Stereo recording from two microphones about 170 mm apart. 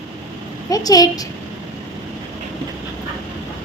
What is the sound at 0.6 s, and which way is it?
Speech, 20° left (ahead or behind).